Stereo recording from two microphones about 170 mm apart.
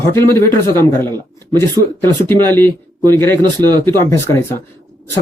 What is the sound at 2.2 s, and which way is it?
Speech, 15° left (ahead or behind).